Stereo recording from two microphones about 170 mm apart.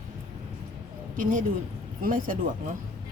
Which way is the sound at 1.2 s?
50° right (ahead or behind).